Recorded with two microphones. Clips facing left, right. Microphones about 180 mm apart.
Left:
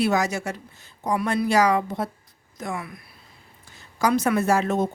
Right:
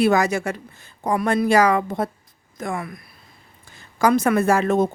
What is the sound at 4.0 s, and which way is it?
Speech, 55° right (ahead or behind).